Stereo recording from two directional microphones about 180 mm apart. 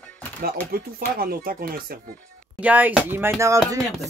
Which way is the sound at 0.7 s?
55° right (ahead or behind).